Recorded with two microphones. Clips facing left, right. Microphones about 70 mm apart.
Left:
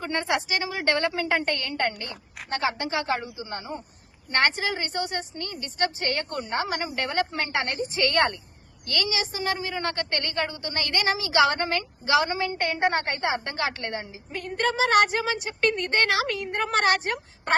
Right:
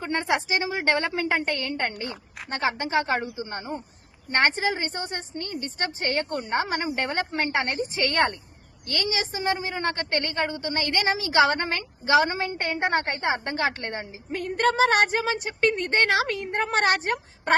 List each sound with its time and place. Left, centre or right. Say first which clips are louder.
0.0 s a woman's voice: right 1 dB; right
2.6 s a woman's voice: right 3 dB; right
4.3 s a woman's voice: right 1 dB; right
7.7 s a woman's voice: left 1 dB; right